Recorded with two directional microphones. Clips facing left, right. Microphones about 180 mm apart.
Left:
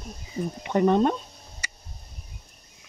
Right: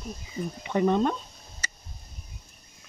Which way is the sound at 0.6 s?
55° left (ahead or behind).